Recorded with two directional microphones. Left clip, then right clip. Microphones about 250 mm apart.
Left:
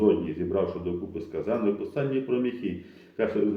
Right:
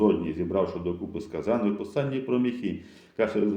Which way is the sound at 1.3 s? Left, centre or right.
Right.